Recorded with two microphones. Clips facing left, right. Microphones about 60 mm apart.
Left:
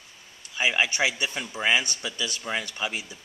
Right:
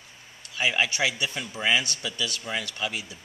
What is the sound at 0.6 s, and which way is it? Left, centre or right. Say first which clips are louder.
A man's voice: left 1 dB; centre.